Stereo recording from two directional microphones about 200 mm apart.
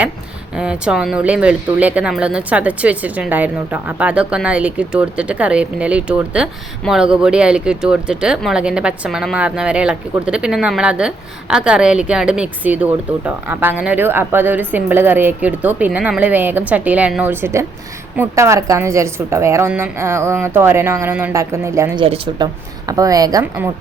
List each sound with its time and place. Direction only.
0.5 s a woman's voice: 5° right (ahead or behind)
22.0 s a woman's voice: 25° right (ahead or behind); by 23.7 s 10° right (ahead or behind)